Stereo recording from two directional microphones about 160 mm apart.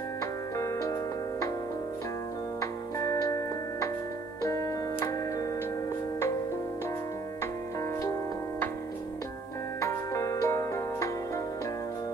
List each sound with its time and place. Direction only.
2.6 s music: 20° left (ahead or behind)
9.8 s music: 20° left (ahead or behind)